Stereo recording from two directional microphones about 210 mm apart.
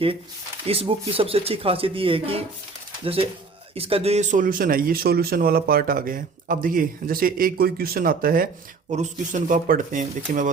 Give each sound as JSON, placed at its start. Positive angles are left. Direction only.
{"t": 0.7, "sound": "speech", "side_deg": -25}